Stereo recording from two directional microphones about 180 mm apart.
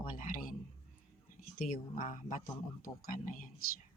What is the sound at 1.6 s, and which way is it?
Speech, 50° left (ahead or behind).